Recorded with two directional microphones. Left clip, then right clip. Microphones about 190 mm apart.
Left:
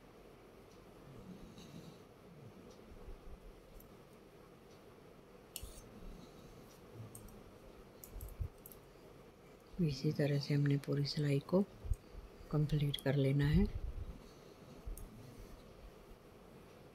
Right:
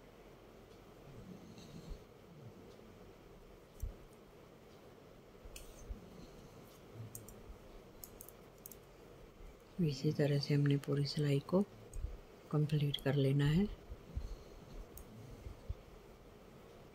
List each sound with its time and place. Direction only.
9.8 s speech: 5° right (ahead or behind)